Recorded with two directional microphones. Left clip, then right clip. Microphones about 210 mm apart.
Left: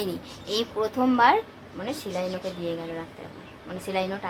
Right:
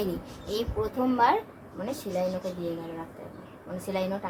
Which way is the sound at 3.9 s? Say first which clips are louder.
Left 3 dB; 35° left (ahead or behind).